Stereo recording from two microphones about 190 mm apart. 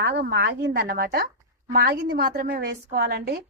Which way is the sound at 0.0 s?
60° right (ahead or behind).